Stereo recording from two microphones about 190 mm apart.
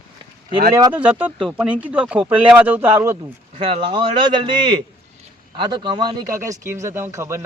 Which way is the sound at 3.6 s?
30° right (ahead or behind).